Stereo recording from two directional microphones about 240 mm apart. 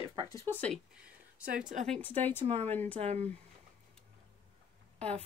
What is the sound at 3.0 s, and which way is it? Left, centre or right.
Speech, right.